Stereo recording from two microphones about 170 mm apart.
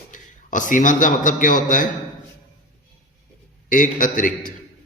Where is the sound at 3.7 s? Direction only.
50° left (ahead or behind).